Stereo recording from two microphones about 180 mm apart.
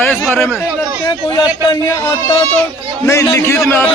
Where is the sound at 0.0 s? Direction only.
10° left (ahead or behind).